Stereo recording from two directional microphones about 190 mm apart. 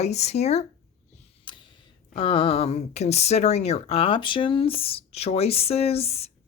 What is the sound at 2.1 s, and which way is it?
Speech, 30° left (ahead or behind).